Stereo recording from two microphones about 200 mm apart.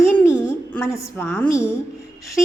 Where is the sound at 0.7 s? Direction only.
15° left (ahead or behind).